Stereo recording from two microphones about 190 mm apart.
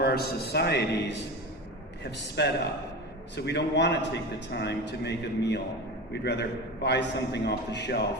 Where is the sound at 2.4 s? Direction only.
60° left (ahead or behind).